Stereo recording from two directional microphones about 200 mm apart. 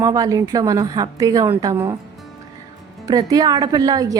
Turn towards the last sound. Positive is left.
turn(degrees=-20)  # may be behind; listen again after turning